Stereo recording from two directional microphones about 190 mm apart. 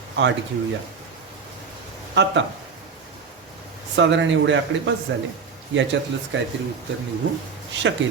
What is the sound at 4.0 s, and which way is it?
Speech, 75° right (ahead or behind).